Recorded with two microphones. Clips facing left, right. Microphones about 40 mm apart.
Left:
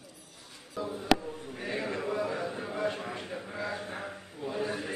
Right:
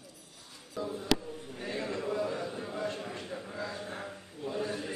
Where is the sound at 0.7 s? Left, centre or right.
Centre.